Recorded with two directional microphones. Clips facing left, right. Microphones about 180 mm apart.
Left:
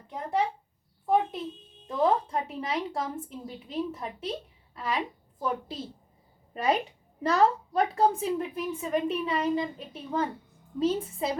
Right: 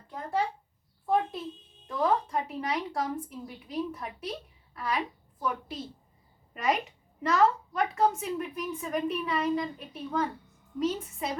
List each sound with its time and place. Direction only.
0.1 s a woman's voice: 20° left (ahead or behind)
1.9 s a woman's voice: 25° left (ahead or behind)